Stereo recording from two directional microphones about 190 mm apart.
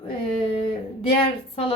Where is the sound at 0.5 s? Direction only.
30° left (ahead or behind).